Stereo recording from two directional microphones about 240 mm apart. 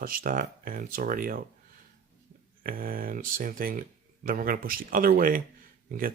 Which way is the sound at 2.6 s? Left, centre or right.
Right.